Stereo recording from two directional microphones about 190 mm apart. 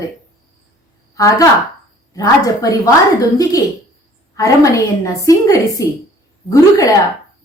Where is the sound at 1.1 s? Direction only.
20° left (ahead or behind).